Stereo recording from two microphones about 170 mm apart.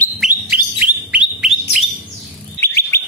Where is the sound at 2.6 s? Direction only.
15° left (ahead or behind).